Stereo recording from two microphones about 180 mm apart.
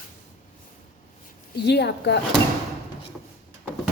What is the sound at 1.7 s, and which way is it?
Speech, 70° left (ahead or behind).